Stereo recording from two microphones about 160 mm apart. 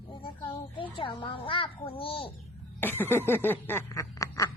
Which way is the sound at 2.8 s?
15° left (ahead or behind).